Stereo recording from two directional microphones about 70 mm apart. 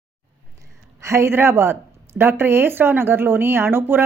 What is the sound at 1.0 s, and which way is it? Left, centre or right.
Speech, right.